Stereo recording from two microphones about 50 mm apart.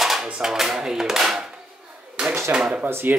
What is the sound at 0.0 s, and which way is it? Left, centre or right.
Dishes, centre.